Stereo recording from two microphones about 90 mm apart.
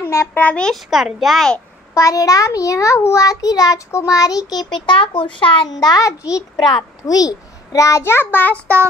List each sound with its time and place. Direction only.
0.0 s a sound: 30° left (ahead or behind)
0.4 s a child's voice: 15° left (ahead or behind)
0.7 s a child's voice: centre (ahead or behind)
2.0 s a child's voice: 40° left (ahead or behind); by 5.7 s 75° left (ahead or behind)
5.8 s a child's voice: 45° left (ahead or behind); by 8.5 s 20° left (ahead or behind)